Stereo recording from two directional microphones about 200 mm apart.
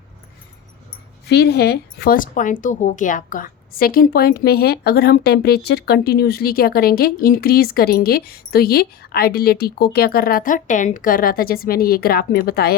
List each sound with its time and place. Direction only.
1.3 s a woman's voice: 55° left (ahead or behind)